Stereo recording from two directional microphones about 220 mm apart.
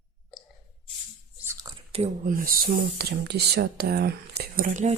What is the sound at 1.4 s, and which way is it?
Whispering, 15° right (ahead or behind).